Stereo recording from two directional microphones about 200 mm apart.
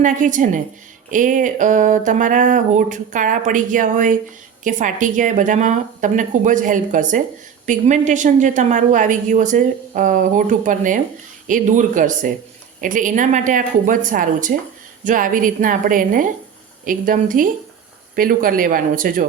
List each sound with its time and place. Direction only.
0.0 s a woman's voice: 40° right (ahead or behind)